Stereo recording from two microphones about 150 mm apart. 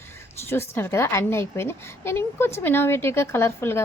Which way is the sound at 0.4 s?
15° left (ahead or behind).